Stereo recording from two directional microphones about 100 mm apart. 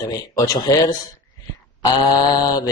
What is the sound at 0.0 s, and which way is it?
Speech, 40° left (ahead or behind).